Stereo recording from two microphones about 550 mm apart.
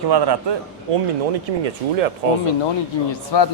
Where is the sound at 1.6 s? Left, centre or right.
Right.